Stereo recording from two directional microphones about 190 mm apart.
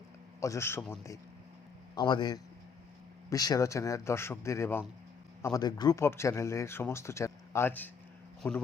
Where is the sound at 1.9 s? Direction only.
20° left (ahead or behind).